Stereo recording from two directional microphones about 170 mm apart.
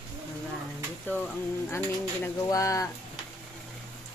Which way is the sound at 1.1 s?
10° left (ahead or behind).